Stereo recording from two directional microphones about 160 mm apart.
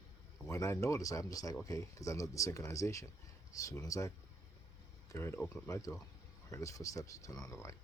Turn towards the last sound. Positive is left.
turn(degrees=20)  # may be behind; listen again after turning